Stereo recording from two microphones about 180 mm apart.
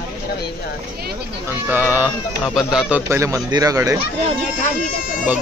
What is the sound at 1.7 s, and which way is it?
Speech, 10° right (ahead or behind).